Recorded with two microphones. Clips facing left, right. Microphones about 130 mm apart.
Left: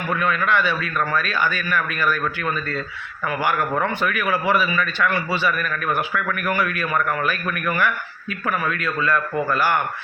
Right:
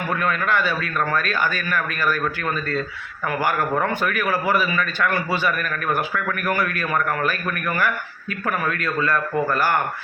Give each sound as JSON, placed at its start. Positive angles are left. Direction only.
{"t": 0.1, "sound": "speech", "side_deg": -40}
{"t": 3.2, "sound": "speech", "side_deg": -45}